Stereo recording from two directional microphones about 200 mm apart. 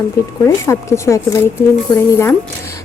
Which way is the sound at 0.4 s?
15° left (ahead or behind).